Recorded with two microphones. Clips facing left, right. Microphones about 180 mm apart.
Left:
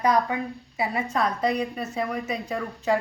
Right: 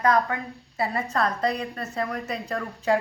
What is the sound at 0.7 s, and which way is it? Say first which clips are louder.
A woman's voice: even; 5° left (ahead or behind).